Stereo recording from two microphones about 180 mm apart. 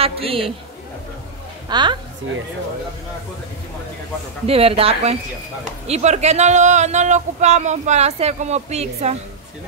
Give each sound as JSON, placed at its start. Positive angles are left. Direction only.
{"t": 0.0, "sound": "speech", "side_deg": -30}
{"t": 1.7, "sound": "a woman's voice", "side_deg": -25}
{"t": 4.5, "sound": "speech", "side_deg": -30}